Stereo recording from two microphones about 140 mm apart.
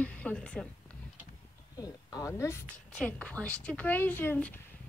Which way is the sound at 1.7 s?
25° left (ahead or behind).